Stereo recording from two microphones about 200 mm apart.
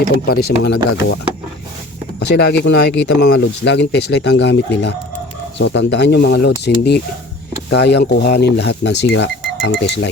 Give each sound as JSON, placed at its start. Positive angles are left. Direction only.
{"t": 0.3, "sound": "speech", "side_deg": 50}
{"t": 2.1, "sound": "speech", "side_deg": 55}